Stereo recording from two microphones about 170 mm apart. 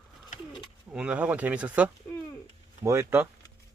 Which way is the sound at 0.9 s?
5° right (ahead or behind).